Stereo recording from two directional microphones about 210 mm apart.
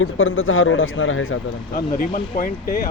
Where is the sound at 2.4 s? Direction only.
45° left (ahead or behind).